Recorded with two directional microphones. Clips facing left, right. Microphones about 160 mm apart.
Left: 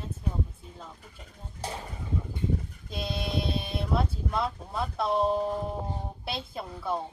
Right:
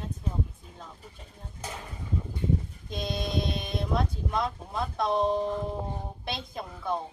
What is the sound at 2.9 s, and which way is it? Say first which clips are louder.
Speech: right 1 dB; 5° left (ahead or behind).